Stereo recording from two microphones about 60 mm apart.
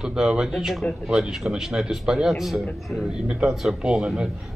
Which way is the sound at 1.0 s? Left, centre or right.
Centre.